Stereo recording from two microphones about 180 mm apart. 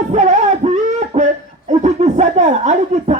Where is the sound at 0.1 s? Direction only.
40° right (ahead or behind).